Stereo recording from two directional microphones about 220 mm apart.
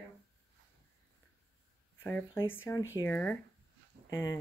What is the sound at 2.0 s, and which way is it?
Speech, 10° left (ahead or behind).